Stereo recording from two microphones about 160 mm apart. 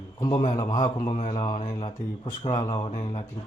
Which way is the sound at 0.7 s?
25° left (ahead or behind).